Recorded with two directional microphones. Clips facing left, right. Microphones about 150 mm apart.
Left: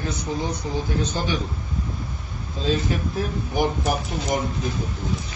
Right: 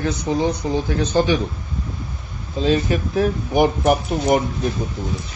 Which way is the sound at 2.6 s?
70° right (ahead or behind).